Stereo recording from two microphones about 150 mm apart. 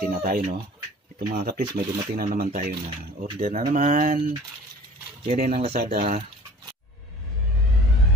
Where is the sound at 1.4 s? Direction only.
90° right.